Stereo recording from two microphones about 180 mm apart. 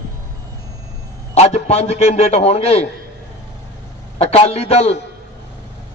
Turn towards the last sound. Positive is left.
turn(degrees=35)  # may be behind; listen again after turning